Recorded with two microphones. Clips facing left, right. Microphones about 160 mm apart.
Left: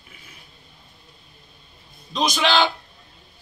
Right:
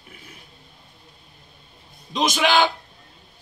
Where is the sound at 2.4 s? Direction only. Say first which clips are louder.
Right 1 dB; 15° right (ahead or behind).